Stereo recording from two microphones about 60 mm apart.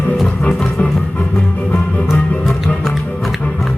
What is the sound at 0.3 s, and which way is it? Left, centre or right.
Music, left.